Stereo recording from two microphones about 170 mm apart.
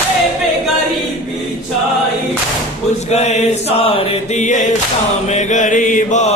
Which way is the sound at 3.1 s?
40° left (ahead or behind).